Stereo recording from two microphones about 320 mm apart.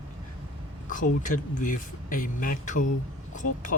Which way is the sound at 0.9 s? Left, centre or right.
Left.